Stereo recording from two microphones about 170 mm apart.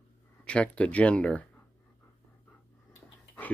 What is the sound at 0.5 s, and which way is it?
Speech, 5° left (ahead or behind).